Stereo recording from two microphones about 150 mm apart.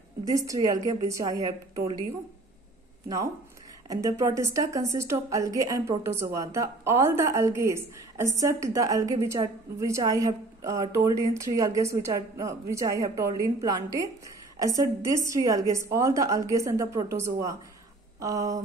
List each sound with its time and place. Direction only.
0.2 s a woman's voice: 20° right (ahead or behind)
3.9 s a woman's voice: 20° right (ahead or behind)